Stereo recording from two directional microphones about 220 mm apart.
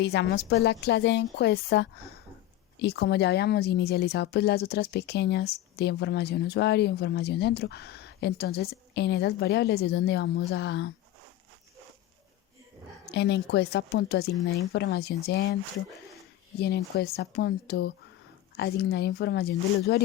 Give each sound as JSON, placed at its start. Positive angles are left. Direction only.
{"t": 0.0, "sound": "speech", "side_deg": 50}
{"t": 13.1, "sound": "speech", "side_deg": 50}
{"t": 16.6, "sound": "speech", "side_deg": 50}